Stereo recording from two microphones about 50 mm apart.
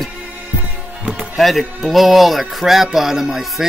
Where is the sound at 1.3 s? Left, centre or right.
Centre.